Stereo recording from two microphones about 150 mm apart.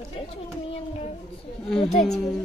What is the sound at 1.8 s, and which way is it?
Speech, 45° left (ahead or behind).